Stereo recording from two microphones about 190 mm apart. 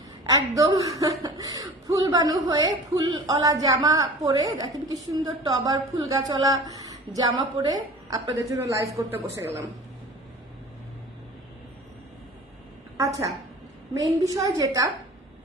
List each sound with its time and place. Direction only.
0.3 s a woman's voice: 15° right (ahead or behind)
13.9 s a woman's voice: 15° right (ahead or behind)